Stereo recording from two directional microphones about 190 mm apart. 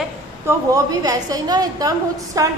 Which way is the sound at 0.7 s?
20° right (ahead or behind).